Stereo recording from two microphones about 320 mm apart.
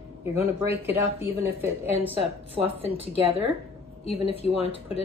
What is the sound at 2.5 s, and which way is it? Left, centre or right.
Speech, centre.